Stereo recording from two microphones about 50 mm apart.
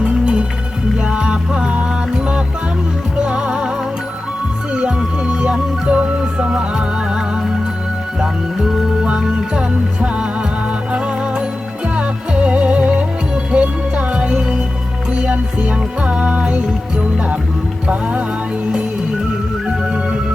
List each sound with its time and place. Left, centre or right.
0.0 s music: right
4.7 s music: centre
5.9 s music: right; by 8.9 s centre
9.6 s music: right
19.6 s music: centre